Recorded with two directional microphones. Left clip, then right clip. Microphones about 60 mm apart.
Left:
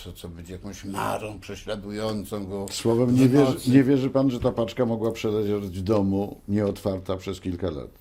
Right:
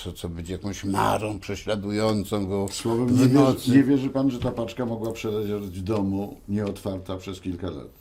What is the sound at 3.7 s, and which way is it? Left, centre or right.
Speech, left.